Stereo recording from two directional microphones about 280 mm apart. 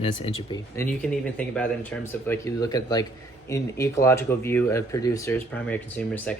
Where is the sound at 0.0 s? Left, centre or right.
Left.